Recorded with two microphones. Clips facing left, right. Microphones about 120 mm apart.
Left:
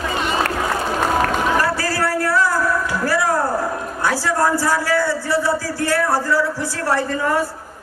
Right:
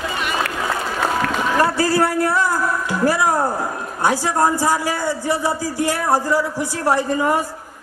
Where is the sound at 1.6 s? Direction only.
20° right (ahead or behind).